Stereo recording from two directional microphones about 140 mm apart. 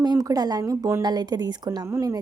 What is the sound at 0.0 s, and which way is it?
A woman's voice, 25° right (ahead or behind).